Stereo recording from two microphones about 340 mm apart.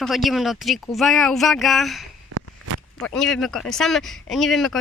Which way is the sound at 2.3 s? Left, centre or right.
Right.